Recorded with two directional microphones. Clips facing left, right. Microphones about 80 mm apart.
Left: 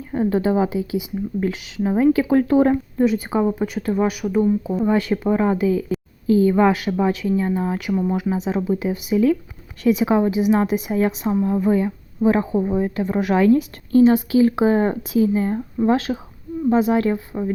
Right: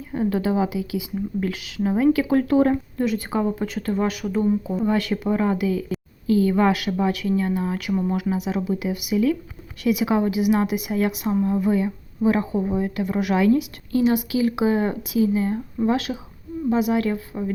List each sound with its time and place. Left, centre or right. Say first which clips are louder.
0.1 s speech: left 3 dB; left